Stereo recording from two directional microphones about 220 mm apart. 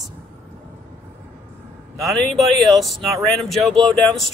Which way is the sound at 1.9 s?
Centre (ahead or behind).